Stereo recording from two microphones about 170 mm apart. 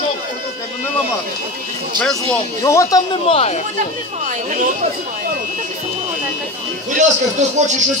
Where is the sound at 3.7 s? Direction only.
45° right (ahead or behind).